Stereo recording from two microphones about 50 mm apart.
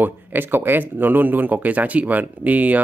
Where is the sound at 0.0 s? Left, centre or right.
Right.